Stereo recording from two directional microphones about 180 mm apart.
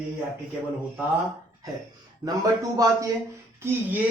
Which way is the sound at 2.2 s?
20° right (ahead or behind).